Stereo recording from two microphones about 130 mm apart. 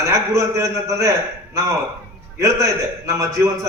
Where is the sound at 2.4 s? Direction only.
25° right (ahead or behind).